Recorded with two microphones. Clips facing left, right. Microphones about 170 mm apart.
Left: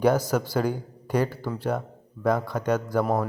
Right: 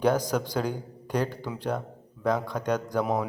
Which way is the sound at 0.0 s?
10° left (ahead or behind).